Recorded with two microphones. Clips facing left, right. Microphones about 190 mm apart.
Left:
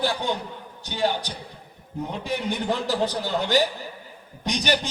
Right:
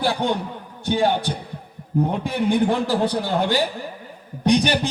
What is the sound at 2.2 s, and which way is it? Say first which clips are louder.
A man's voice: right 4 dB; 50° right (ahead or behind).